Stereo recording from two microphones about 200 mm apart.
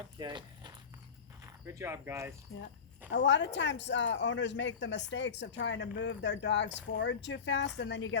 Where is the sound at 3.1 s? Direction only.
65° left (ahead or behind).